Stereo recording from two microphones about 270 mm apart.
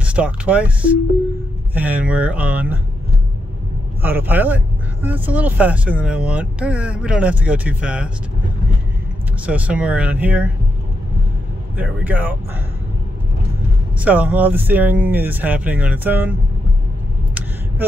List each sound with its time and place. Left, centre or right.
0.0 s speech: centre
4.0 s speech: centre
9.5 s speech: centre
11.7 s speech: centre
13.9 s speech: centre
17.3 s a sound: centre